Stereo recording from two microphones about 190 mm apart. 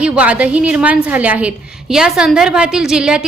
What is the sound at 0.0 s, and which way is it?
A woman's voice, 5° right (ahead or behind).